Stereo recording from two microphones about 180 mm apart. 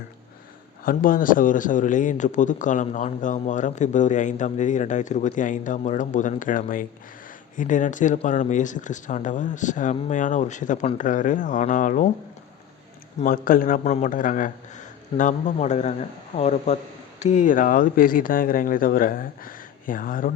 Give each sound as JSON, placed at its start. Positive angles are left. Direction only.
{"t": 0.9, "sound": "speech", "side_deg": 50}
{"t": 13.1, "sound": "speech", "side_deg": 50}